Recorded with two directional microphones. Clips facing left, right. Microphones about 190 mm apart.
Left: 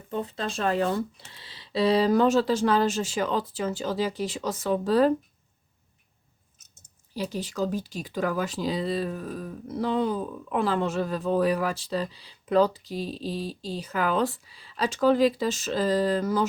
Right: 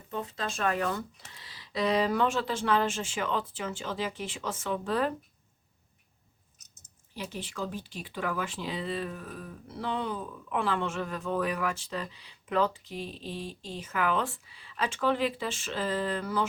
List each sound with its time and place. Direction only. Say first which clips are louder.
0.1 s speech: left 4 dB; 35° left (ahead or behind)
7.1 s speech: left 7 dB; 35° left (ahead or behind)